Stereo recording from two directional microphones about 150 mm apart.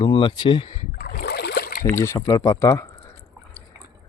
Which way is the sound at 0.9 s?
90° left.